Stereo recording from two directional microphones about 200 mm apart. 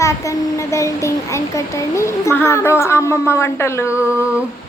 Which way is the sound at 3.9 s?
5° right (ahead or behind).